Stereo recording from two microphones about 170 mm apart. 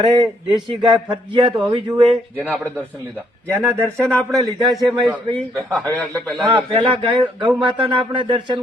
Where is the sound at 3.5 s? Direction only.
15° right (ahead or behind).